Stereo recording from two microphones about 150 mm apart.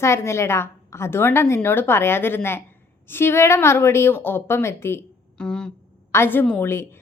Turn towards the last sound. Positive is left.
turn(degrees=15)  # may be behind; listen again after turning